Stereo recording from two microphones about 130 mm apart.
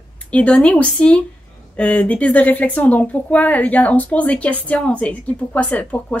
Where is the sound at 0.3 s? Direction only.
10° left (ahead or behind).